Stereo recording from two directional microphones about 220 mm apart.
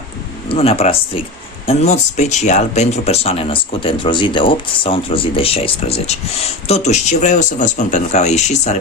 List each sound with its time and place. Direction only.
0.4 s speech: 25° left (ahead or behind)